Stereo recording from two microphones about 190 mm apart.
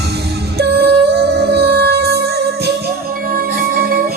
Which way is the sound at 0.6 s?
60° right (ahead or behind).